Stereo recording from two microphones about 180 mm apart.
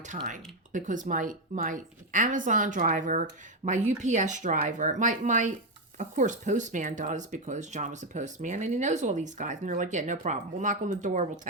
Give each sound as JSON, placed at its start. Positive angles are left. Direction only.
{"t": 0.1, "sound": "speech", "side_deg": -45}